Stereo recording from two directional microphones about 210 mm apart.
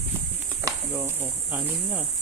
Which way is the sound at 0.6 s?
10° right (ahead or behind).